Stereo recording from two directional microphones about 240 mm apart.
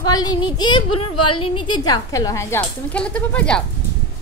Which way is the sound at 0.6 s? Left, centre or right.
Centre.